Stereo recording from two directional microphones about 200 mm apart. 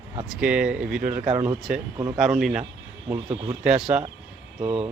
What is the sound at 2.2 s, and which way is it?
Speech, centre (ahead or behind).